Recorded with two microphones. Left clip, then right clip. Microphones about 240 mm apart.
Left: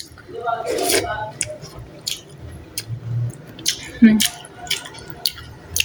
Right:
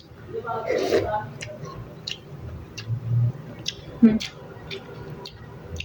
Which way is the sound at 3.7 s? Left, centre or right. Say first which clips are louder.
Left 5 dB; left.